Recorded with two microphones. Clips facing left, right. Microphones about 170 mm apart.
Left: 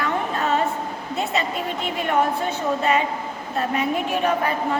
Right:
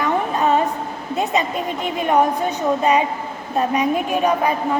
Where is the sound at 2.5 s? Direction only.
15° right (ahead or behind).